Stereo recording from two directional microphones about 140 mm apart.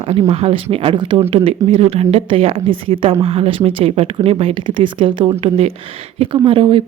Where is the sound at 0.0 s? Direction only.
45° right (ahead or behind).